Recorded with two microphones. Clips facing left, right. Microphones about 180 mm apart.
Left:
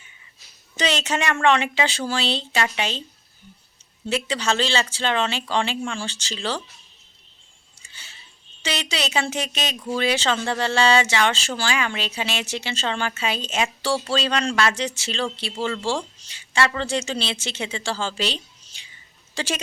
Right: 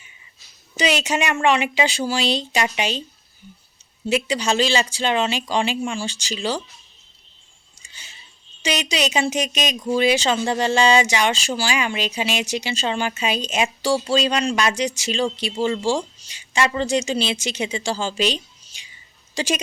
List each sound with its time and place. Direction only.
0.8 s speech: 10° right (ahead or behind)
4.1 s speech: 15° right (ahead or behind)
7.8 s a sound: 15° right (ahead or behind)
8.6 s speech: 15° right (ahead or behind)